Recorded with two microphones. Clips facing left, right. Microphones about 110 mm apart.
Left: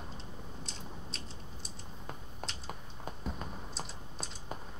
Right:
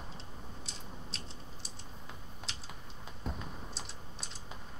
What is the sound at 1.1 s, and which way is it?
Typing, centre (ahead or behind).